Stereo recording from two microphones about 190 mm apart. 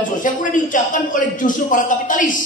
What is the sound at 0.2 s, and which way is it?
A man's voice, 45° left (ahead or behind).